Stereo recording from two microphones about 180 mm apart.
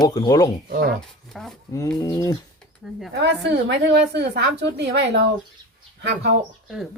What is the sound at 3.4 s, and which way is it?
A woman's voice, 75° right (ahead or behind).